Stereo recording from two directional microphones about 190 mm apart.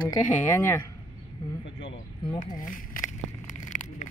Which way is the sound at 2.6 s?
45° left (ahead or behind).